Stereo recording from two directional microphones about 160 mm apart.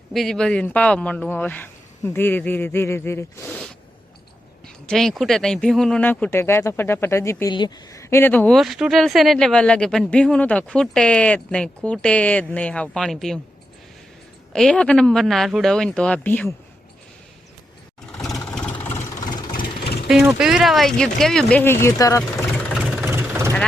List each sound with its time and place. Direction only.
0.1 s speech: centre (ahead or behind)
3.4 s speech: 5° left (ahead or behind)
4.9 s speech: centre (ahead or behind)
8.5 s speech: centre (ahead or behind)
14.5 s speech: 5° left (ahead or behind)
18.1 s vehicle: centre (ahead or behind); by 19.6 s 25° left (ahead or behind)
19.8 s vehicle: 80° left
20.1 s speech: 5° right (ahead or behind)
21.6 s speech: 15° left (ahead or behind)
23.0 s vehicle: 15° right (ahead or behind)